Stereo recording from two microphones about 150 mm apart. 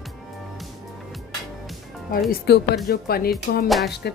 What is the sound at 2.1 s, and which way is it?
Speech, 85° left.